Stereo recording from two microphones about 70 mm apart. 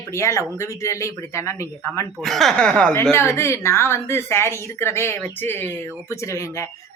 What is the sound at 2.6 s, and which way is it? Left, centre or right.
Speech, centre.